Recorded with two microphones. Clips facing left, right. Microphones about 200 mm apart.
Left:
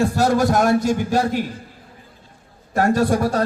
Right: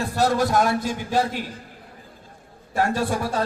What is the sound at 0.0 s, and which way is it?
Speech, 45° left (ahead or behind).